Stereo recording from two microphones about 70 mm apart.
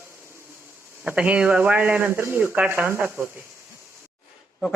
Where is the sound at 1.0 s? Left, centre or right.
Centre.